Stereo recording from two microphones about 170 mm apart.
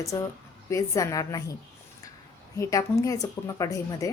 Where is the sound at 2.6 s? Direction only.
20° left (ahead or behind).